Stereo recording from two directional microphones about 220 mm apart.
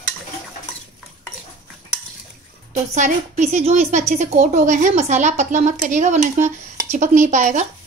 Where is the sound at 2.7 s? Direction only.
30° right (ahead or behind).